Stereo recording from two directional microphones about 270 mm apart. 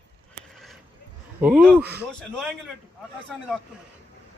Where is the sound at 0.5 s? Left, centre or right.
Centre.